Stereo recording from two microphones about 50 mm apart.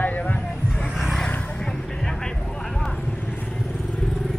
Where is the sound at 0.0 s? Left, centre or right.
Left.